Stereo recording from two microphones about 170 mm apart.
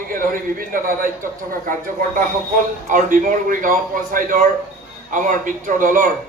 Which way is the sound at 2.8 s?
55° right (ahead or behind).